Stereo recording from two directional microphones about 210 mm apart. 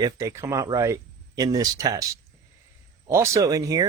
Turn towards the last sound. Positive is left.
turn(degrees=-15)  # may be behind; listen again after turning